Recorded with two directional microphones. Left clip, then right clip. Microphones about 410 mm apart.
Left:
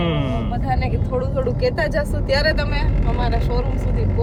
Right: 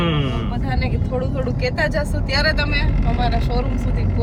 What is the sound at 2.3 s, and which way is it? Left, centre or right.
Speech, centre.